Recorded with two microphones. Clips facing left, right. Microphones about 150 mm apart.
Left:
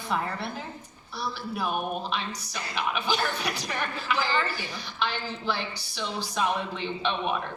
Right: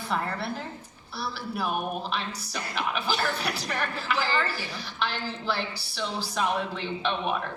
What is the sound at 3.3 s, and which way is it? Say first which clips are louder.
Speech: right 1 dB; 30° right (ahead or behind).